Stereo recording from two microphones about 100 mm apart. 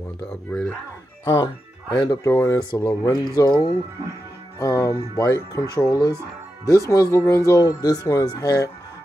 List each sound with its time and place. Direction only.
0.5 s speech: 10° left (ahead or behind)
1.2 s speech: 40° left (ahead or behind)
2.2 s speech: 30° left (ahead or behind)
2.7 s speech: 40° left (ahead or behind)
6.1 s speech: 35° right (ahead or behind)
6.9 s speech: 30° left (ahead or behind)